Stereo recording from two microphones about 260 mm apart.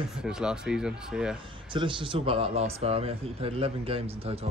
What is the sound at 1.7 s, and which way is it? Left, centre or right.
Speech, centre.